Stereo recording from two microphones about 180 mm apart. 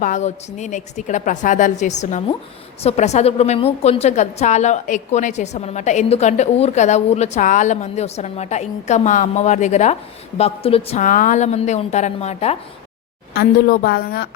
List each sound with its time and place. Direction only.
0.0 s a woman's voice: 40° left (ahead or behind)
13.3 s a woman's voice: 55° left (ahead or behind)